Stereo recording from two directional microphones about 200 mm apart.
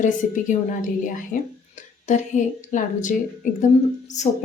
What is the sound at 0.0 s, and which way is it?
Speech, 40° left (ahead or behind).